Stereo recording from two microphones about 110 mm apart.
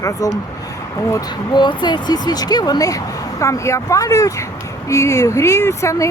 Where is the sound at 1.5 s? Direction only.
45° left (ahead or behind).